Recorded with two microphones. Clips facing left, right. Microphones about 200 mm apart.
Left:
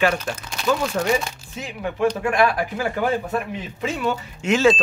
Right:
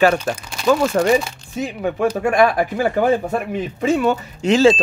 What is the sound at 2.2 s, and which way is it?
Speech, 50° right (ahead or behind).